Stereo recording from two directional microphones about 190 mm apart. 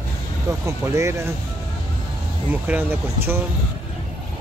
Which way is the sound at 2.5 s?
10° right (ahead or behind).